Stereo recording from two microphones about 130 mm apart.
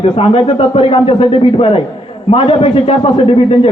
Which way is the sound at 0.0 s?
45° left (ahead or behind).